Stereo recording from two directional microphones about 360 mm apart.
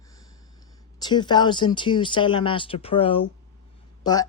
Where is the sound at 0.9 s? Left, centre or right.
Centre.